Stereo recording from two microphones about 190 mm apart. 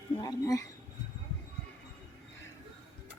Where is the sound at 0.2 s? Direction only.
20° left (ahead or behind).